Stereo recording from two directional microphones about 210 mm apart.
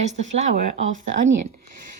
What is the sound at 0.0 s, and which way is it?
Speech, 35° right (ahead or behind).